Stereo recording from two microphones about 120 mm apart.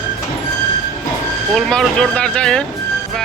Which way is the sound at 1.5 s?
5° left (ahead or behind).